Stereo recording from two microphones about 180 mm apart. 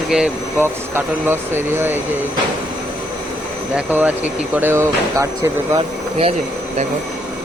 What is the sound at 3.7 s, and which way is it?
Speech, 10° right (ahead or behind).